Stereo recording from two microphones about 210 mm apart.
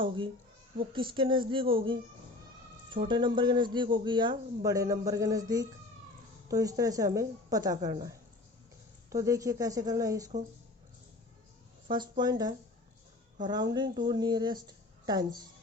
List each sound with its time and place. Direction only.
0.9 s speech: 25° right (ahead or behind)
9.0 s speech: 15° right (ahead or behind)
11.9 s speech: 20° right (ahead or behind)